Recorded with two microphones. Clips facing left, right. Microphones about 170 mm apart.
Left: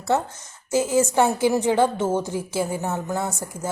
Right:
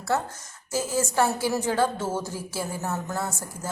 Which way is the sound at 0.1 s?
20° left (ahead or behind).